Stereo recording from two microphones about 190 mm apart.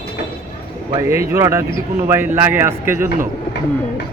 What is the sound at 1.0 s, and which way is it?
Speech, 15° right (ahead or behind).